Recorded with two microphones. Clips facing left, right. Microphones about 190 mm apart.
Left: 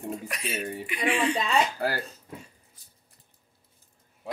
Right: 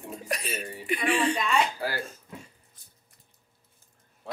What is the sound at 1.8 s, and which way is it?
Speech, 45° left (ahead or behind).